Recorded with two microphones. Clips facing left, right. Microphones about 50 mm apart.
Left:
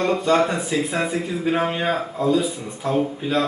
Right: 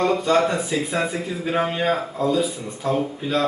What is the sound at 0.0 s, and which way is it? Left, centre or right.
A man's voice, centre.